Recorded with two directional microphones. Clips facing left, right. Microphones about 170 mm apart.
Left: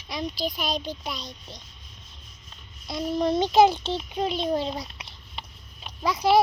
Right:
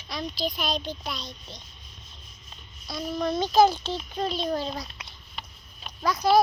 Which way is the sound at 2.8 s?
25° left (ahead or behind).